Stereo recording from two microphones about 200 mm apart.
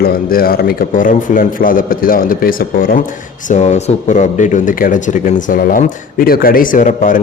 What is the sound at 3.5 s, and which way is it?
Speech, 35° left (ahead or behind).